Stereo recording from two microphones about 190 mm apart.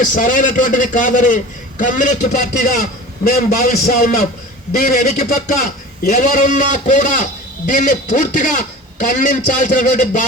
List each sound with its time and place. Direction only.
0.0 s a man's voice: 45° left (ahead or behind)